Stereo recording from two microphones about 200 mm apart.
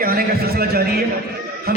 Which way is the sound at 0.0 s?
50° right (ahead or behind).